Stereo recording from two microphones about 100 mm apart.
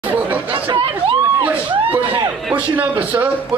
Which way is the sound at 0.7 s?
65° right (ahead or behind).